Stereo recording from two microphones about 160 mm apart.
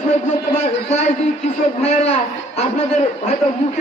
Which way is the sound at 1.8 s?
40° left (ahead or behind).